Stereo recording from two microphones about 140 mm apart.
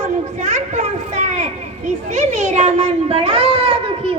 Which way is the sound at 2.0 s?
55° right (ahead or behind).